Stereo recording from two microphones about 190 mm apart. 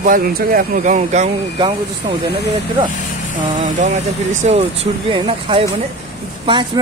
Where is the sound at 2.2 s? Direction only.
55° right (ahead or behind).